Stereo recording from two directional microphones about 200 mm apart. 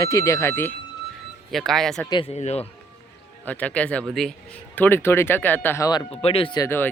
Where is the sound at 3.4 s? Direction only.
10° left (ahead or behind); by 6.6 s 25° left (ahead or behind).